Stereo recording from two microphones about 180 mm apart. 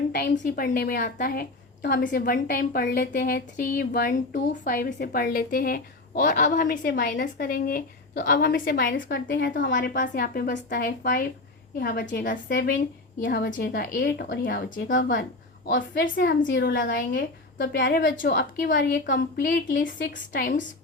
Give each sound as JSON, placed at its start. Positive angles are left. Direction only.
{"t": 0.1, "sound": "a woman's voice", "side_deg": 60}
{"t": 1.8, "sound": "a woman's voice", "side_deg": 65}
{"t": 9.7, "sound": "a woman's voice", "side_deg": 50}
{"t": 10.5, "sound": "a woman's voice", "side_deg": 65}
{"t": 16.5, "sound": "a woman's voice", "side_deg": 80}
{"t": 19.0, "sound": "a woman's voice", "side_deg": 75}
{"t": 20.0, "sound": "a woman's voice", "side_deg": 50}